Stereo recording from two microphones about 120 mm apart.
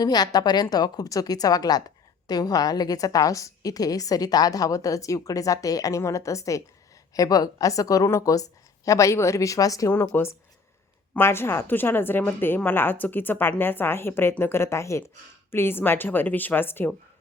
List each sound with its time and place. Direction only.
0.0 s a woman's voice: 35° left (ahead or behind)
9.9 s a woman's voice: 15° left (ahead or behind)